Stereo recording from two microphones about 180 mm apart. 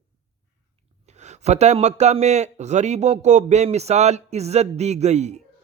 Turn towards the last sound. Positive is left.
turn(degrees=-40)  # may be behind; listen again after turning